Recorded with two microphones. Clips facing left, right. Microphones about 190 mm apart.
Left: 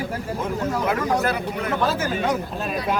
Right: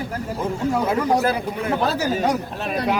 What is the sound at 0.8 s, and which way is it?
A man's voice, 25° right (ahead or behind).